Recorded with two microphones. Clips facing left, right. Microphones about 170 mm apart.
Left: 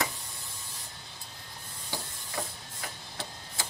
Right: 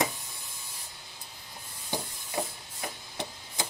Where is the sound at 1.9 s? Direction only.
20° right (ahead or behind).